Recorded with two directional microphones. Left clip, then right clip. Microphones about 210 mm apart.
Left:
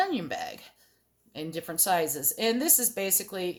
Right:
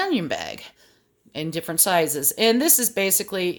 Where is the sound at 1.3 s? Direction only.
45° right (ahead or behind).